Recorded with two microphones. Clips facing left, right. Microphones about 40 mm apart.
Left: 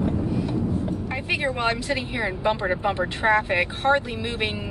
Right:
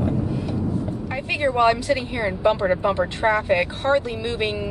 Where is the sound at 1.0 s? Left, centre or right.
Centre.